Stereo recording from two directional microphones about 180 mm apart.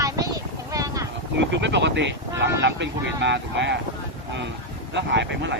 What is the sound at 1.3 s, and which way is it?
Speech, 75° right (ahead or behind).